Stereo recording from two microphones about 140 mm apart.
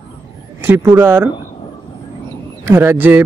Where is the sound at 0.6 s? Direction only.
15° right (ahead or behind).